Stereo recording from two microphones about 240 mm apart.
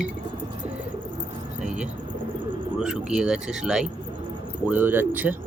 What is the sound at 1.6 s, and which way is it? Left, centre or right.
Bird, centre.